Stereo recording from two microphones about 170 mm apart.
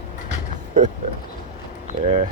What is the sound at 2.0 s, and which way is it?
Speech, 35° right (ahead or behind).